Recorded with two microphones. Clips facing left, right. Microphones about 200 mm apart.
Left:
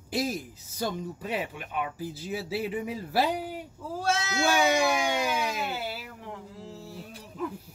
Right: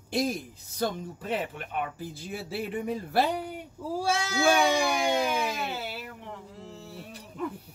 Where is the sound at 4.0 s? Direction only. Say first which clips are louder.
Even; 10° right (ahead or behind).